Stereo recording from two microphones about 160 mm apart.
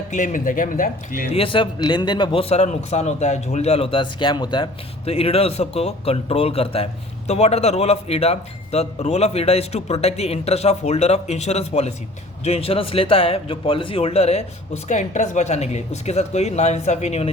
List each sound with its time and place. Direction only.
0.1 s speech: 50° left (ahead or behind)
1.3 s a man's voice: 35° left (ahead or behind)